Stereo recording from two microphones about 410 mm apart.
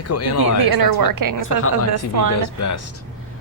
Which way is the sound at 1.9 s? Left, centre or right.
Right.